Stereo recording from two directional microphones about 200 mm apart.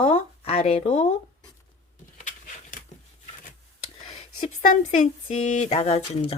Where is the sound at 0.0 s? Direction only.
30° left (ahead or behind).